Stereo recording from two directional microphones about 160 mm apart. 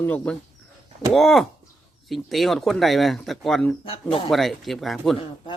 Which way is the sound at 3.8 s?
35° left (ahead or behind).